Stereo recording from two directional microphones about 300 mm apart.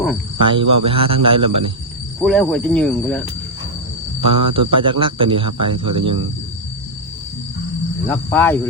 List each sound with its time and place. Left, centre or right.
0.4 s speech: centre
2.2 s speech: centre
4.3 s speech: centre
8.0 s speech: centre